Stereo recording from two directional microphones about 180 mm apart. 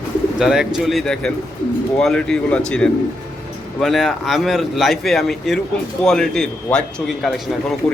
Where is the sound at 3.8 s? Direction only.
Centre (ahead or behind).